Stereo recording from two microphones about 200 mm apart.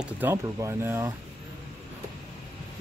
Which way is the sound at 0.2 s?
15° right (ahead or behind).